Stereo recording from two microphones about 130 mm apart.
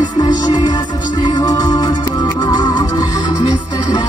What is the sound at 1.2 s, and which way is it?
Music, 30° left (ahead or behind).